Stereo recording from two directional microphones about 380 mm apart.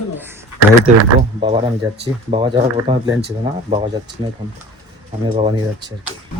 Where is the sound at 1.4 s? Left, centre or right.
Centre.